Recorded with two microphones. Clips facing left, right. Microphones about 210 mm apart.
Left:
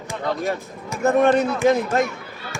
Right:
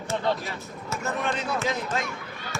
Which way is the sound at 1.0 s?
60° left (ahead or behind).